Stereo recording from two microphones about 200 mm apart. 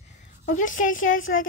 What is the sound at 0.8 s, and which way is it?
Speech, 80° left.